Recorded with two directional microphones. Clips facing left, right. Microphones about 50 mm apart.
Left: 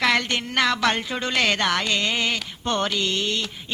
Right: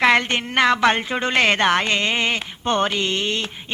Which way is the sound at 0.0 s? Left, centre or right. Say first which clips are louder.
Right 5 dB; right.